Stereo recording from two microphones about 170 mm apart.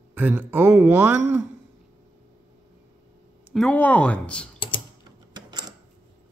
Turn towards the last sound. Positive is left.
turn(degrees=-25)  # may be behind; listen again after turning